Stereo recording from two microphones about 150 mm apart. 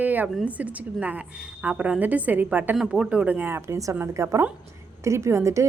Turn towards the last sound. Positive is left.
turn(degrees=-20)  # may be behind; listen again after turning